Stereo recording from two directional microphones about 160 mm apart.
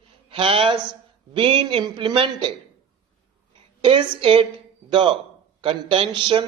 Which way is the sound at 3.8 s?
30° right (ahead or behind).